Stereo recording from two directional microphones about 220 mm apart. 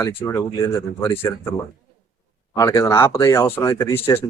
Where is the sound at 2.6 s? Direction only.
15° left (ahead or behind).